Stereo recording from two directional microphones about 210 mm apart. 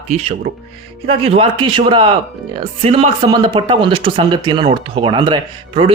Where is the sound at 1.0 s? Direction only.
30° right (ahead or behind).